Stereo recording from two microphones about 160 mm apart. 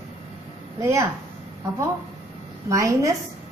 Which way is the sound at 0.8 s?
20° right (ahead or behind).